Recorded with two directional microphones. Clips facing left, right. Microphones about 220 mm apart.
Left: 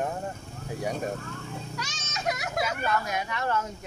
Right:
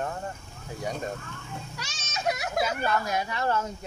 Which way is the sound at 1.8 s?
25° right (ahead or behind).